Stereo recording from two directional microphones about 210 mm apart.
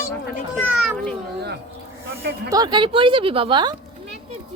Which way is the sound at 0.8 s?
5° right (ahead or behind).